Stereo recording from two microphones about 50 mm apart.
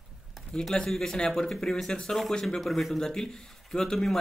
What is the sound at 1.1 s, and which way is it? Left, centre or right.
Speech, centre.